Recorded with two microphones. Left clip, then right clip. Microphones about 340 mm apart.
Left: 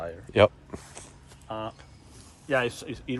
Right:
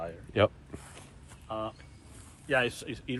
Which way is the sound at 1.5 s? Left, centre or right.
Left.